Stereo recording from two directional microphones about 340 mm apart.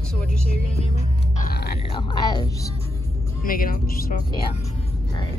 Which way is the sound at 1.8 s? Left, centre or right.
Centre.